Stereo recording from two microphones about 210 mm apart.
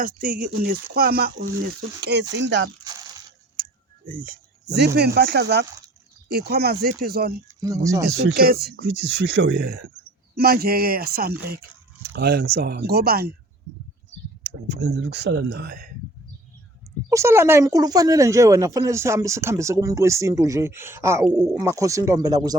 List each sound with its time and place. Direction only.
0.0 s speech: 40° right (ahead or behind); by 2.6 s 60° right (ahead or behind)
3.6 s a sound: 40° right (ahead or behind)
4.9 s speech: 50° right (ahead or behind)
7.6 s speech: 15° right (ahead or behind)
8.0 s speech: 55° right (ahead or behind)
14.7 s speech: 55° right (ahead or behind)
17.1 s speech: 15° right (ahead or behind)